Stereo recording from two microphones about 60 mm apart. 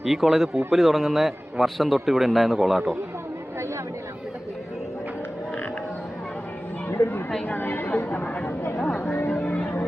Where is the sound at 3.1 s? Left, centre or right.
Right.